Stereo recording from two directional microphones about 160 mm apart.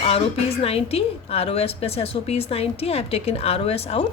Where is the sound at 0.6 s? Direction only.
40° left (ahead or behind).